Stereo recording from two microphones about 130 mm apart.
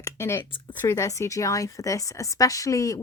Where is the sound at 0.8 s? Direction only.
20° left (ahead or behind).